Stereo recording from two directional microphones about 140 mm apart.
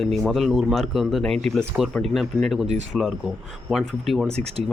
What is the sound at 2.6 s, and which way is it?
Speech, 55° right (ahead or behind).